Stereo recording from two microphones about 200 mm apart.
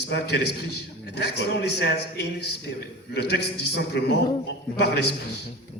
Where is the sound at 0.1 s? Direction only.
55° left (ahead or behind).